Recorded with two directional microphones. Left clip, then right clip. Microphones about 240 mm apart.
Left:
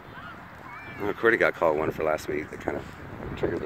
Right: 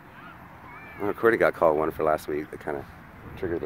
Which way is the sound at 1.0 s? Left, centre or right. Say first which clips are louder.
Right 1 dB; centre.